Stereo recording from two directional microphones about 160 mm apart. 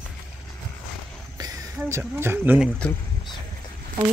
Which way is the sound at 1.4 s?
25° right (ahead or behind).